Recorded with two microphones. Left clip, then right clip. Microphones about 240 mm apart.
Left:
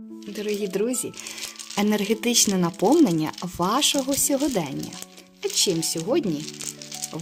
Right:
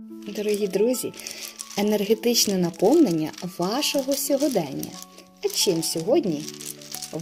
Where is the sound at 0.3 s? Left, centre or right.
Centre.